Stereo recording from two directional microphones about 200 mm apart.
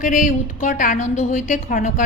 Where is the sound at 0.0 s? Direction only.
40° left (ahead or behind).